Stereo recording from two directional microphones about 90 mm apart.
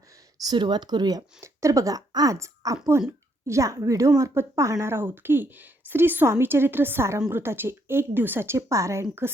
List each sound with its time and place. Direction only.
0.4 s speech: 55° right (ahead or behind)
1.4 s a woman's voice: 35° right (ahead or behind)